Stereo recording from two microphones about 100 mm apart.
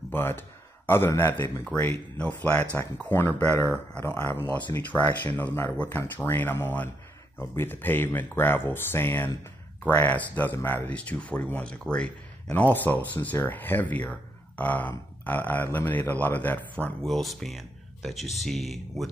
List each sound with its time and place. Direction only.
0.1 s speech: 20° left (ahead or behind)
17.0 s speech: centre (ahead or behind)